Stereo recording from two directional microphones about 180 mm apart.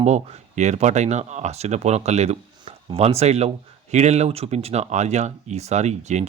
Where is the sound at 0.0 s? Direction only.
40° right (ahead or behind).